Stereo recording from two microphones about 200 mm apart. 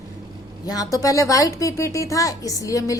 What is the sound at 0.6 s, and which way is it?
A woman's voice, 20° left (ahead or behind).